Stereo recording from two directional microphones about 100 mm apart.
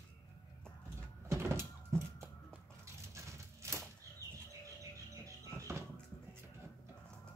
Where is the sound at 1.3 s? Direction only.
25° right (ahead or behind).